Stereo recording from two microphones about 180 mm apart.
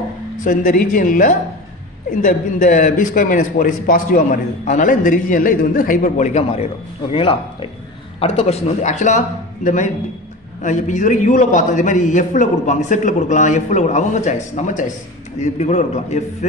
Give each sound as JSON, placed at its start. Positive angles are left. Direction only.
{"t": 0.4, "sound": "a man's voice", "side_deg": 45}
{"t": 10.6, "sound": "a man's voice", "side_deg": 45}